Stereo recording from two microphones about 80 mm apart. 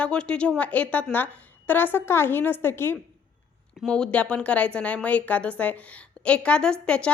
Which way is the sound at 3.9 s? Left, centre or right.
Centre.